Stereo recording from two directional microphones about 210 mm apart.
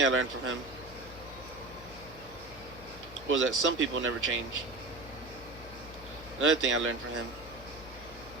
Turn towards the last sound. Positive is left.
turn(degrees=-65)  # may be behind; listen again after turning